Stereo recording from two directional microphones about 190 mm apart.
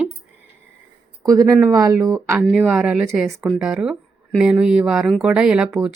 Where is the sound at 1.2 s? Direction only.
15° right (ahead or behind).